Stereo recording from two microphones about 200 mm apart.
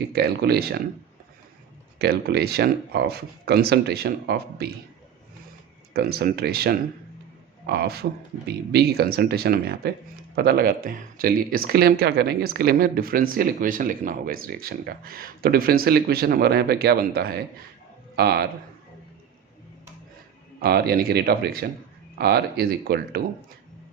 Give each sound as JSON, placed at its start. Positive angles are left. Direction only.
{"t": 0.1, "sound": "speech", "side_deg": -55}
{"t": 2.0, "sound": "speech", "side_deg": -55}
{"t": 5.9, "sound": "speech", "side_deg": -50}
{"t": 20.6, "sound": "speech", "side_deg": -50}